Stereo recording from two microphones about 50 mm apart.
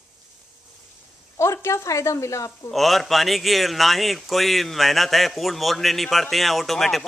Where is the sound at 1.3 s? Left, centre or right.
Left.